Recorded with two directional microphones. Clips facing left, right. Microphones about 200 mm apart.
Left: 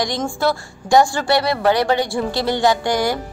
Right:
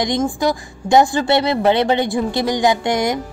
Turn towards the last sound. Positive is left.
turn(degrees=-20)  # may be behind; listen again after turning